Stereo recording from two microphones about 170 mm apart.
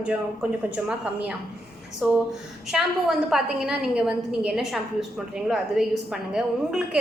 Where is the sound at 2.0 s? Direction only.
Centre (ahead or behind).